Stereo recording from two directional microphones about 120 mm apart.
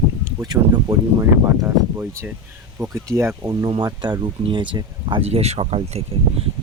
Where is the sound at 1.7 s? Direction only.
20° right (ahead or behind).